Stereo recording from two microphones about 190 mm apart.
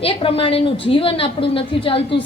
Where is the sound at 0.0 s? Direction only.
30° left (ahead or behind).